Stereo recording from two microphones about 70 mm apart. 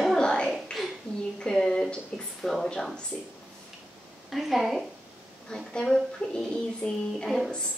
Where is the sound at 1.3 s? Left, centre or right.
Centre.